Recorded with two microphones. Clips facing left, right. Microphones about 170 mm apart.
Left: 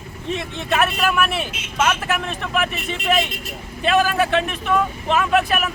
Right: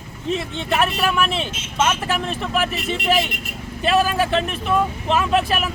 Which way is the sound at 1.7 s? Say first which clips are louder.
Even; 25° right (ahead or behind).